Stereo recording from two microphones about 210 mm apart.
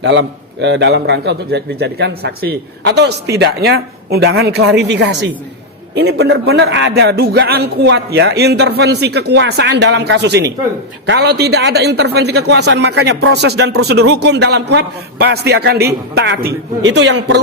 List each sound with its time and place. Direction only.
0.0 s a man's voice: 60° right (ahead or behind)